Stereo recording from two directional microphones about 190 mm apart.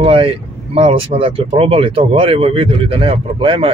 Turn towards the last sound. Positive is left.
turn(degrees=-25)  # may be behind; listen again after turning